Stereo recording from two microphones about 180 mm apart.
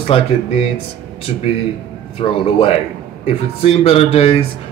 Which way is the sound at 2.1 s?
30° left (ahead or behind).